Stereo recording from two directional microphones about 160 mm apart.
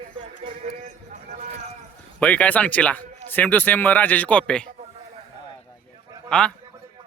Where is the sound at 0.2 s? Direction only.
40° right (ahead or behind).